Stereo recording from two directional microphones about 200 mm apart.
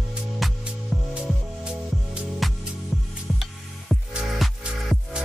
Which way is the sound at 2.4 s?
Centre (ahead or behind).